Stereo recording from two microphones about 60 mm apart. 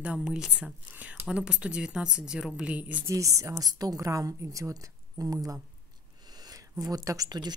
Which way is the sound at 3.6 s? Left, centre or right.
Right.